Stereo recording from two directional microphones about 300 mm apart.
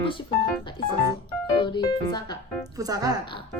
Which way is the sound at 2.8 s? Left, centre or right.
Centre.